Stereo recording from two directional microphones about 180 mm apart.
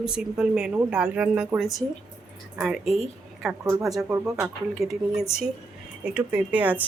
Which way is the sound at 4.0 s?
10° right (ahead or behind).